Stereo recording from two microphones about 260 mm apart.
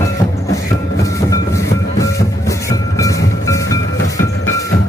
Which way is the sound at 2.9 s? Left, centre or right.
Centre.